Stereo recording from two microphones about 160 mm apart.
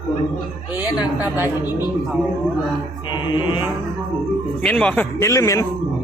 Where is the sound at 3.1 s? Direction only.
30° left (ahead or behind).